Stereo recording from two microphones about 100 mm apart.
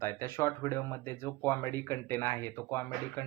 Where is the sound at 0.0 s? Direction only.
25° left (ahead or behind).